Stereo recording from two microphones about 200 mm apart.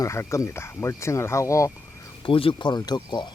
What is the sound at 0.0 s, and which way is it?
Speech, 15° left (ahead or behind).